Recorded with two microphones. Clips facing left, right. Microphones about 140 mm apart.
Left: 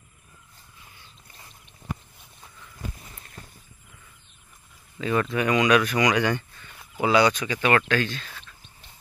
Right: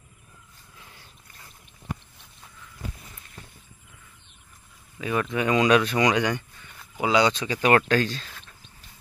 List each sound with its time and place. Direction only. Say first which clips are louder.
5.0 s speech: left 1 dB; 10° right (ahead or behind); by 8.3 s 35° right (ahead or behind)